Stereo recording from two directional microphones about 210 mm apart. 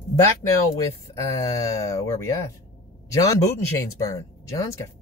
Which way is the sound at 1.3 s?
15° left (ahead or behind).